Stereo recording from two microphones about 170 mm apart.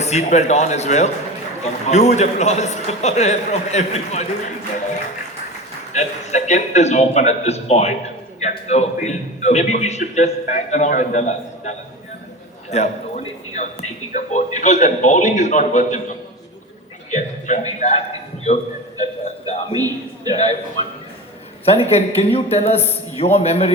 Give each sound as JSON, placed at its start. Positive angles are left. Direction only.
{"t": 0.0, "sound": "a man's voice", "side_deg": 40}
{"t": 5.9, "sound": "a man's voice", "side_deg": 45}
{"t": 12.7, "sound": "a man's voice", "side_deg": 40}
{"t": 19.7, "sound": "a man's voice", "side_deg": -20}
{"t": 20.3, "sound": "a man's voice", "side_deg": 40}
{"t": 21.6, "sound": "a man's voice", "side_deg": 35}